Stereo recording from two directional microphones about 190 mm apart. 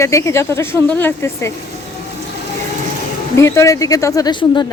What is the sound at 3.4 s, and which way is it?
Speech, 15° left (ahead or behind).